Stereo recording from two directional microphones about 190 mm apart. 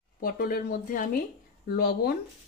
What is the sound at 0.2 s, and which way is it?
Speech, 50° left (ahead or behind).